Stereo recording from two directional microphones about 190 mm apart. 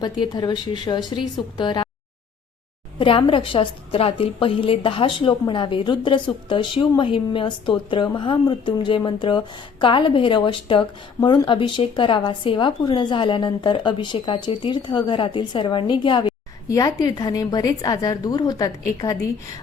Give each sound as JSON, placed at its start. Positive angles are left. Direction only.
{"t": 0.0, "sound": "a woman's voice", "side_deg": 25}
{"t": 3.0, "sound": "a woman's voice", "side_deg": 30}